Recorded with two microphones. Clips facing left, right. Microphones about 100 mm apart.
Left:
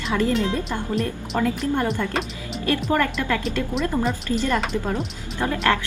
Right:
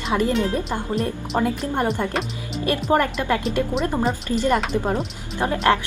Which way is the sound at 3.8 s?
35° right (ahead or behind).